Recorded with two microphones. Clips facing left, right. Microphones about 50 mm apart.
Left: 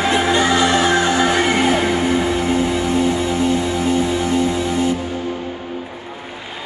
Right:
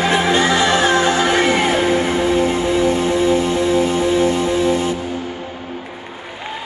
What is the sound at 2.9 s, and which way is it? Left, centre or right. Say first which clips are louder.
Music: right 2 dB; right.